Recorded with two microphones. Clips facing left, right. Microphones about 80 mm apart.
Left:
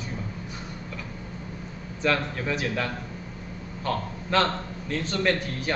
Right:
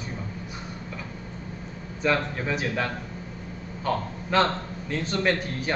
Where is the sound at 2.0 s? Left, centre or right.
Centre.